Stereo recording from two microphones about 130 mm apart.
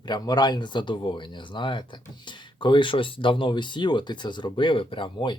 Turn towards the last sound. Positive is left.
turn(degrees=35)  # may be behind; listen again after turning